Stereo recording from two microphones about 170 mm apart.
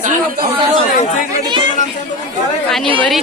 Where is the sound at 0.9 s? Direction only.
50° left (ahead or behind).